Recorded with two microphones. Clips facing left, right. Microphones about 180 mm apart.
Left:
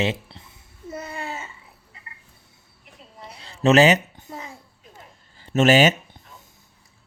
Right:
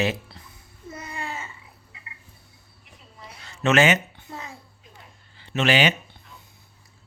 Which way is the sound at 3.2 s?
30° left (ahead or behind).